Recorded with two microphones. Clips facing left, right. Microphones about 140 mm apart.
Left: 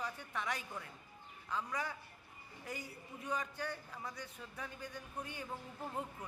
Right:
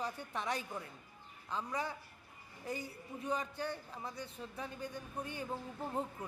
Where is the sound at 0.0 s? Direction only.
30° right (ahead or behind).